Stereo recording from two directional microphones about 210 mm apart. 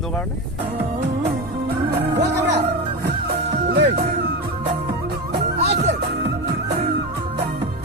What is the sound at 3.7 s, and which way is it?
Music, 50° right (ahead or behind).